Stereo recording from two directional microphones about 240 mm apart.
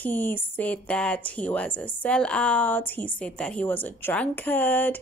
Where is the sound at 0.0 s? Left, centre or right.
Centre.